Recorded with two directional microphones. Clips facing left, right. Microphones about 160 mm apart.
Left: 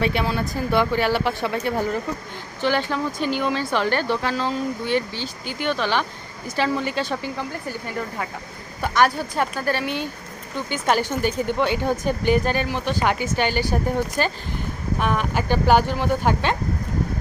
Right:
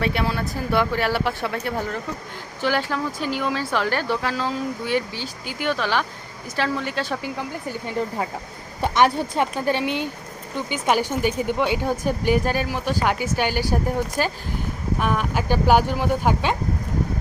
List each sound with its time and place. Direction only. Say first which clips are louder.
0.0 s speech: left 1 dB; centre (ahead or behind)
7.9 s speech: right 6 dB; 25° right (ahead or behind); by 16.6 s 5° right (ahead or behind)